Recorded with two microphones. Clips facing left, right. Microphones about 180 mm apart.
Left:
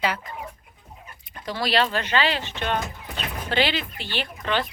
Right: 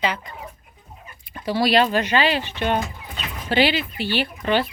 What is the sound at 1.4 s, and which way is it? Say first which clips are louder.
Speech: right 5 dB; 10° right (ahead or behind).